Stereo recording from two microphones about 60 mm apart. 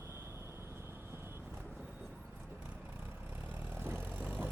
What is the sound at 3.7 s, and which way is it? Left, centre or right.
Vehicle, right.